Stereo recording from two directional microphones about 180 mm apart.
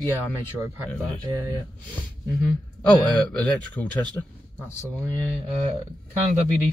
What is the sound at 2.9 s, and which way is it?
A man's voice, 10° left (ahead or behind).